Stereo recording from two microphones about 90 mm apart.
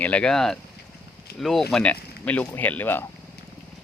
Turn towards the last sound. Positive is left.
turn(degrees=20)  # may be behind; listen again after turning